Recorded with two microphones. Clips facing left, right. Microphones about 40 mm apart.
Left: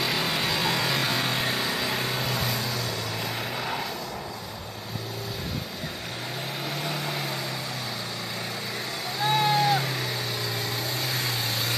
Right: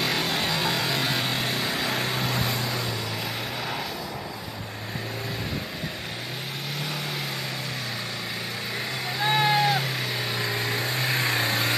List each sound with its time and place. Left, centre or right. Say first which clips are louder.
0.1 s a sound: right 1 dB; centre
1.9 s vehicle: right 1 dB; right
9.2 s vehicle: right 1 dB; centre
9.7 s vehicle: even; centre
10.4 s vehicle: right 3 dB; centre
10.7 s vehicle: right 4 dB; right
11.3 s vehicle: right 5 dB; right